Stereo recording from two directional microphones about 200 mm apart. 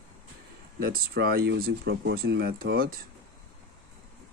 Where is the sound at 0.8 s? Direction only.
50° right (ahead or behind).